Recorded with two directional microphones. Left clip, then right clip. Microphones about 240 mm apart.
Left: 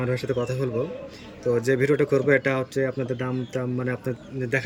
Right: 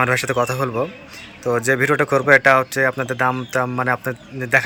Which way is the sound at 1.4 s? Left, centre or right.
Centre.